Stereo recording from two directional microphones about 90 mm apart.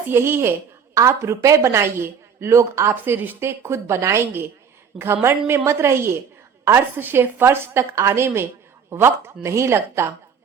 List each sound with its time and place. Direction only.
0.1 s a woman's voice: 25° right (ahead or behind)